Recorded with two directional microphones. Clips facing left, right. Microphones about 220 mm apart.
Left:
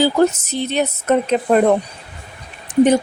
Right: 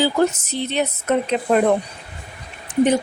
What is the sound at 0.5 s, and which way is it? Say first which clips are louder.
Speech: left 3 dB; 45° left (ahead or behind).